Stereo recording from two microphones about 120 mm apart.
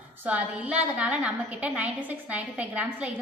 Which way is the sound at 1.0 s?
10° right (ahead or behind).